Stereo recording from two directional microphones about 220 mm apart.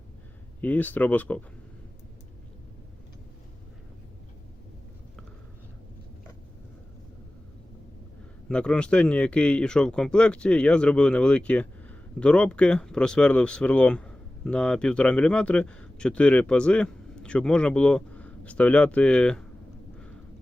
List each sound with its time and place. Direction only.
0.6 s speech: 5° left (ahead or behind)
8.4 s speech: 5° left (ahead or behind)